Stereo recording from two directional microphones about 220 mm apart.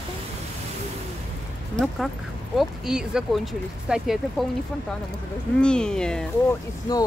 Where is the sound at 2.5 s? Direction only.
Centre (ahead or behind).